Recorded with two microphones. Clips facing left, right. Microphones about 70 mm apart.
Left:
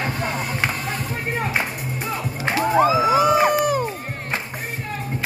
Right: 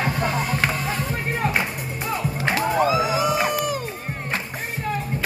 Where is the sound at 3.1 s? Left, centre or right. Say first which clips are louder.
Left 5 dB; left.